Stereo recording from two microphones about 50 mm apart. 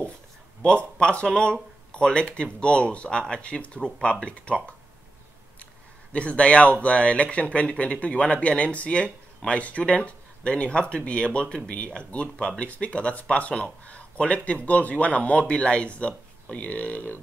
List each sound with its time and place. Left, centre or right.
0.6 s speech: centre
6.1 s speech: left